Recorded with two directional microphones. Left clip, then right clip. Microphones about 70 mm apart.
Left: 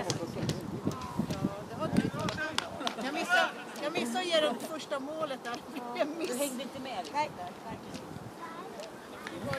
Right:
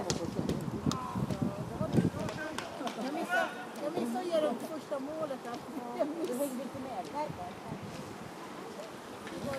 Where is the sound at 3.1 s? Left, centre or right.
Right.